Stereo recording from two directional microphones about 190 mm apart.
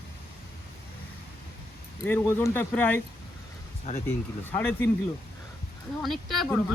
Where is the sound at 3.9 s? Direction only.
40° left (ahead or behind).